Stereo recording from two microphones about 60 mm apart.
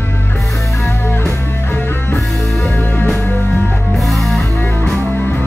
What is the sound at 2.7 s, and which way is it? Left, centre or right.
Music, left.